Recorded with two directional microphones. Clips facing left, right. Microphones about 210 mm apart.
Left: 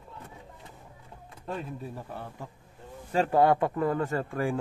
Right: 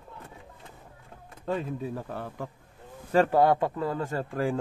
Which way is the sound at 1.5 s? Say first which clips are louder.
Right 5 dB; 90° right.